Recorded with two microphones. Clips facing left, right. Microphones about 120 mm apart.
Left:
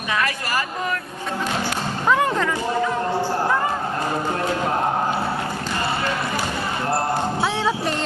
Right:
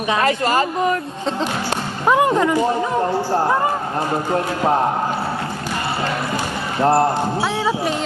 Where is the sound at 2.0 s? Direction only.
20° right (ahead or behind).